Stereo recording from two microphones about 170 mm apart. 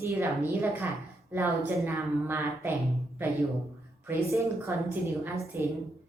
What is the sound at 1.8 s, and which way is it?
A woman's voice, 15° right (ahead or behind).